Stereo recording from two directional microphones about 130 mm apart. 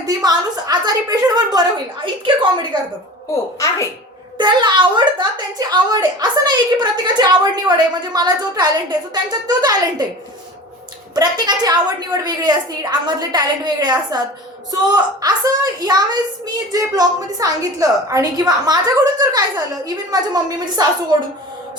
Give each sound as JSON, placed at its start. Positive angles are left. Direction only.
{"t": 0.0, "sound": "a woman's voice", "side_deg": -30}
{"t": 4.4, "sound": "a woman's voice", "side_deg": -35}
{"t": 11.1, "sound": "a woman's voice", "side_deg": -30}